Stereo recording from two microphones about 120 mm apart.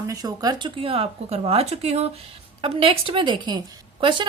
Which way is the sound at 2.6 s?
50° right (ahead or behind).